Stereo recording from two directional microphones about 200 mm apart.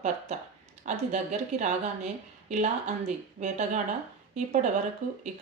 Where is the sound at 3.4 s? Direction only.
35° right (ahead or behind).